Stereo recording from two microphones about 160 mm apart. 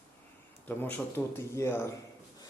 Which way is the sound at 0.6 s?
15° left (ahead or behind).